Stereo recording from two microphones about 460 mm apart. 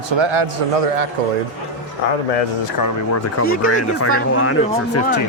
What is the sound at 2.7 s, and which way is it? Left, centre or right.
Speech, left.